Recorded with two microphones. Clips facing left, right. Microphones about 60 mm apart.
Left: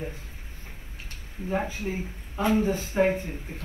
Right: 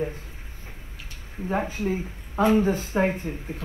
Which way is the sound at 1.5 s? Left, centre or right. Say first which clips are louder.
Right 3 dB; right.